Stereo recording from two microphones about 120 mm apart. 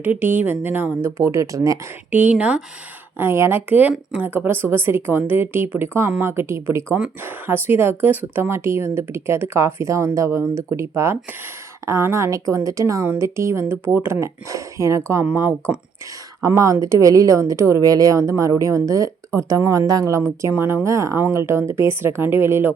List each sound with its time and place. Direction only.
0.0 s speech: 15° right (ahead or behind)
2.0 s speech: 15° right (ahead or behind)
3.2 s speech: 20° right (ahead or behind)